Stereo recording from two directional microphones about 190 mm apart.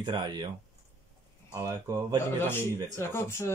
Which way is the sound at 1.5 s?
15° right (ahead or behind).